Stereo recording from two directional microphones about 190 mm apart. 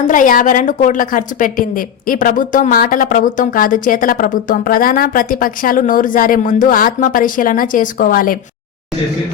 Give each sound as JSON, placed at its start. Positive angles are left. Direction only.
{"t": 0.0, "sound": "a woman's voice", "side_deg": 45}